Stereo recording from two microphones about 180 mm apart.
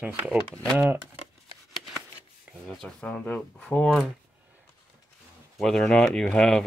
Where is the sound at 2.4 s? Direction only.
Centre (ahead or behind).